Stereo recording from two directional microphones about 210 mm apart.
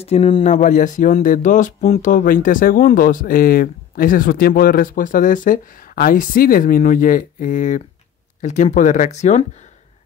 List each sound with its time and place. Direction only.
0.0 s speech: 30° left (ahead or behind)